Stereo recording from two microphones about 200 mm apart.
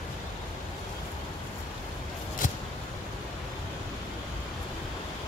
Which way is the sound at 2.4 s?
40° left (ahead or behind).